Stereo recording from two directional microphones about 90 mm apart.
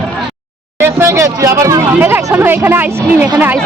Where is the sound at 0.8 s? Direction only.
30° right (ahead or behind).